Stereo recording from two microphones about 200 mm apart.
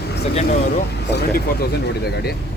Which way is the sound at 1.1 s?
55° left (ahead or behind).